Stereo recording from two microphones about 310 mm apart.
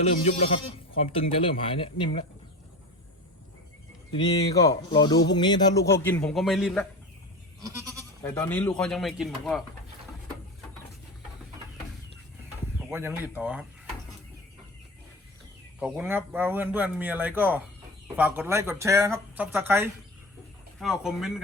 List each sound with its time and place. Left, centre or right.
1.1 s a man's voice: centre
4.1 s a man's voice: centre
8.2 s a man's voice: centre
12.9 s a man's voice: centre
15.8 s a man's voice: centre